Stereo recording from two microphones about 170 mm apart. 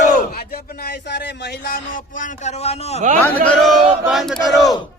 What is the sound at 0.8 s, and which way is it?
Speech, 70° left (ahead or behind).